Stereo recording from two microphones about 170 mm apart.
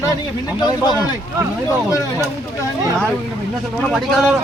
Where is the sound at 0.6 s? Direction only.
25° left (ahead or behind).